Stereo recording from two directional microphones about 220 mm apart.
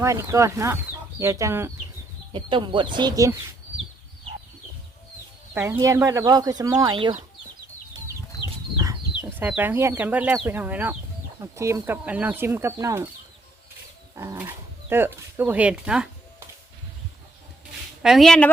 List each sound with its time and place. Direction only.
0.0 s speech: 15° right (ahead or behind)
5.7 s speech: 15° right (ahead or behind)
8.8 s speech: 10° right (ahead or behind)
14.2 s speech: 10° right (ahead or behind)
18.0 s speech: centre (ahead or behind)